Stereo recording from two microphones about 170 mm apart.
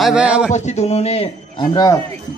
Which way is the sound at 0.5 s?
45° left (ahead or behind).